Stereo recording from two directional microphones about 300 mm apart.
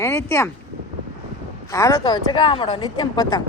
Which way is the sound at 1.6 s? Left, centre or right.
Centre.